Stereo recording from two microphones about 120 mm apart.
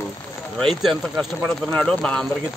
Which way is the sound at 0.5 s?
Centre (ahead or behind).